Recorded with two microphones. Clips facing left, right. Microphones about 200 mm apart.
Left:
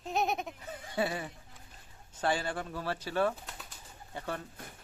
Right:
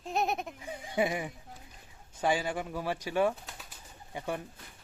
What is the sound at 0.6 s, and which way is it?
Speech, 15° right (ahead or behind).